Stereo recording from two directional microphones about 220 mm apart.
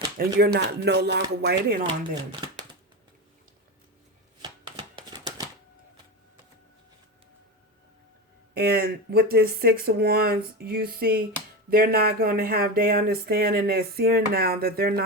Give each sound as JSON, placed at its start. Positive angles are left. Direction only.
{"t": 0.2, "sound": "speech", "side_deg": -45}
{"t": 4.4, "sound": "shuffling cards", "side_deg": -20}
{"t": 8.5, "sound": "speech", "side_deg": -45}